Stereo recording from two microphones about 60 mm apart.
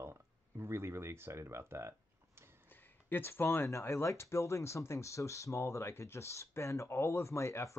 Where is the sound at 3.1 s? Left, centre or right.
Left.